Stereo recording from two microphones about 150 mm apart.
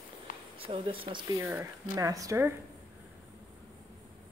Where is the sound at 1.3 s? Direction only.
15° right (ahead or behind).